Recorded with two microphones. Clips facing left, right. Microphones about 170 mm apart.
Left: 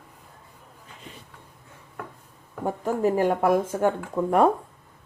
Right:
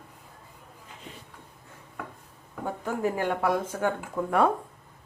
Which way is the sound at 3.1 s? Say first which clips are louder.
Left 5 dB; 40° left (ahead or behind).